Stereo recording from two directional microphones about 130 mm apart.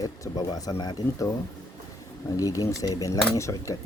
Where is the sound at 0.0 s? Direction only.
30° left (ahead or behind).